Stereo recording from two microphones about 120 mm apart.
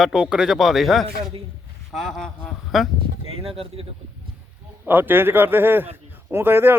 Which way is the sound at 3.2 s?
50° right (ahead or behind).